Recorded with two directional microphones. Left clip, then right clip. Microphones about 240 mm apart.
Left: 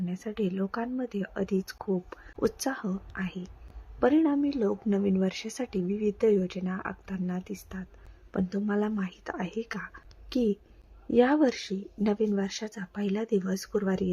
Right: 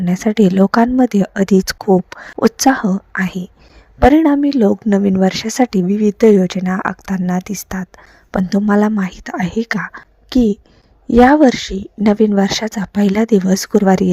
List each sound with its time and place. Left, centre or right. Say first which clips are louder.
0.0 s speech: right 18 dB; right